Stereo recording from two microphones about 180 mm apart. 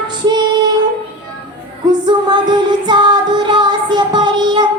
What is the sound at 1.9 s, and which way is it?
Music, 25° right (ahead or behind).